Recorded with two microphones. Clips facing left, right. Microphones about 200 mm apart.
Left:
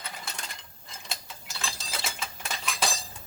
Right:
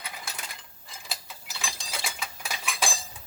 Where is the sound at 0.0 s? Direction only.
Centre (ahead or behind).